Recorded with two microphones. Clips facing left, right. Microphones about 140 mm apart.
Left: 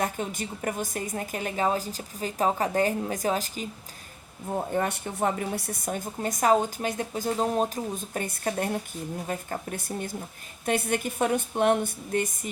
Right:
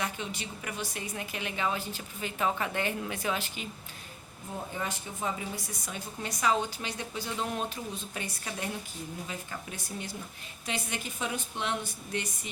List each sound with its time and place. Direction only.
0.0 s speech: 45° left (ahead or behind)
4.5 s speech: 55° left (ahead or behind)